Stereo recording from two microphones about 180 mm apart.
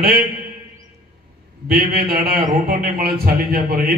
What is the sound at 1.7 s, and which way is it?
A man's voice, 55° right (ahead or behind).